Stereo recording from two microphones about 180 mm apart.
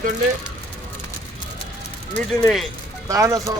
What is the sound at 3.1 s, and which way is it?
Speech, 15° right (ahead or behind).